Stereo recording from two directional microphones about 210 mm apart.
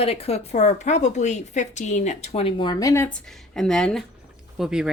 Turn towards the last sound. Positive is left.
turn(degrees=0)  # may be behind; listen again after turning